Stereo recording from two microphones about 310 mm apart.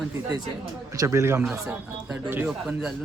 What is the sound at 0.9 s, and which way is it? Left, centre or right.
Speech, centre.